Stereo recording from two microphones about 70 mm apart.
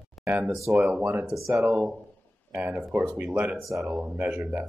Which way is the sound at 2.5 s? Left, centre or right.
Right.